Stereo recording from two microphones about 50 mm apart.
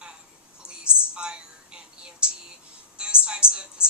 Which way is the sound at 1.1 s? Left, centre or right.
Centre.